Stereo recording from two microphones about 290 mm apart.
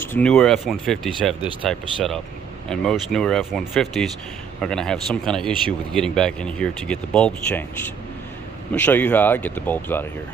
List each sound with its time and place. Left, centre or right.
0.0 s speech: centre